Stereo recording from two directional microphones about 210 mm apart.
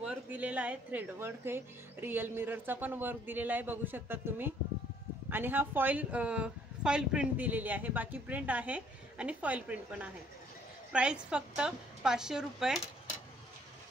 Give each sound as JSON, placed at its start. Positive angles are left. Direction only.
{"t": 0.0, "sound": "a woman's voice", "side_deg": -5}